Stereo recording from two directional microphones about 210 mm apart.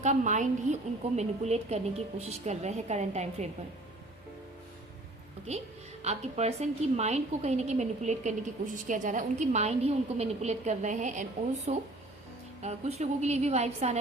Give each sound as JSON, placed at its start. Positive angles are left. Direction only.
{"t": 0.0, "sound": "a woman's voice", "side_deg": -35}
{"t": 5.5, "sound": "a woman's voice", "side_deg": -30}